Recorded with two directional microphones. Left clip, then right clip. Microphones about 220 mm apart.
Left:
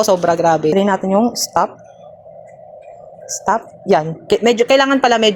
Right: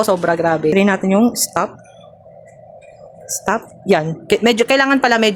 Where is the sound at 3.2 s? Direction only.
30° right (ahead or behind).